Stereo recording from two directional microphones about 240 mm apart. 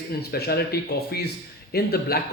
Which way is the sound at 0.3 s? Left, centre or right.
Left.